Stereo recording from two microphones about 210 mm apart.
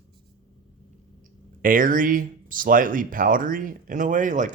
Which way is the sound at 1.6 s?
40° right (ahead or behind).